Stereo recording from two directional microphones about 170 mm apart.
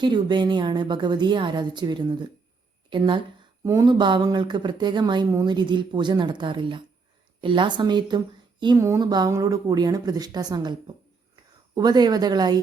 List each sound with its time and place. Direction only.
0.0 s a woman's voice: 25° right (ahead or behind)